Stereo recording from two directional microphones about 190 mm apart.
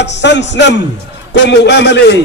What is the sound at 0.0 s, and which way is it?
A man's voice, 65° left (ahead or behind).